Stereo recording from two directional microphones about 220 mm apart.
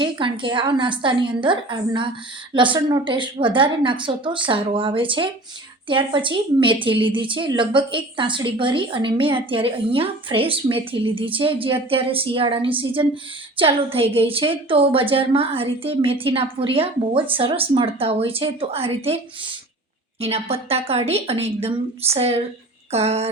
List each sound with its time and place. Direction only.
0.0 s a woman's voice: 20° right (ahead or behind)